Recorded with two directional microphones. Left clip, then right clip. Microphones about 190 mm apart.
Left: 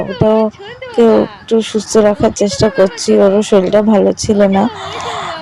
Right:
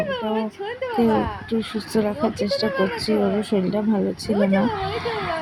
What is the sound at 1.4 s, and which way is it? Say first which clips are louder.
Speech: left 13 dB; 40° left (ahead or behind).